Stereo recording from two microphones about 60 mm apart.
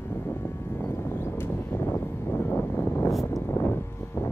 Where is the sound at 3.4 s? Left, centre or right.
Left.